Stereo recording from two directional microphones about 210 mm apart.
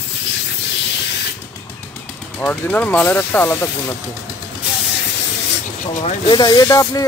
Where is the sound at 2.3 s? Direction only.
5° left (ahead or behind).